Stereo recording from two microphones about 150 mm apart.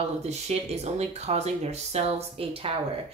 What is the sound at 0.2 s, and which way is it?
A woman's voice, 45° right (ahead or behind).